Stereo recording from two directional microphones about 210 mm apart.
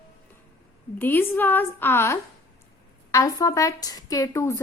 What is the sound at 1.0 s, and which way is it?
Speech, 10° left (ahead or behind).